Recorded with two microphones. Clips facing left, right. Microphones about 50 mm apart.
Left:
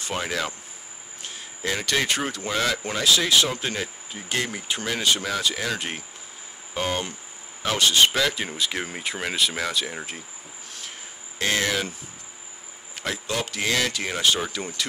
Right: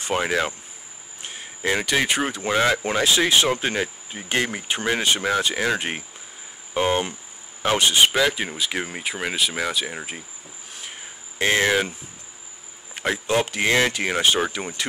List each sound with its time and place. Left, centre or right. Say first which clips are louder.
0.0 s speech: right 5 dB; right
10.7 s cricket: right 2 dB; centre
12.9 s speech: right 6 dB; right